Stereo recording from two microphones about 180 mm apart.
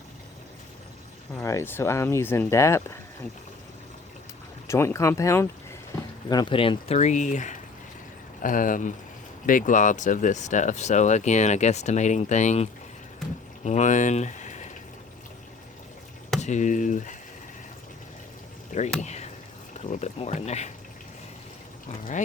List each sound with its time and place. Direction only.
1.4 s speech: 15° left (ahead or behind)
4.7 s speech: 15° left (ahead or behind); by 12.6 s 40° left (ahead or behind)
13.7 s speech: 40° left (ahead or behind)
16.4 s speech: 40° left (ahead or behind)
18.7 s speech: 45° left (ahead or behind)